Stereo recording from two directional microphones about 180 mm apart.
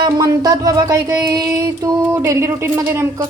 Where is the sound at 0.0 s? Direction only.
20° right (ahead or behind).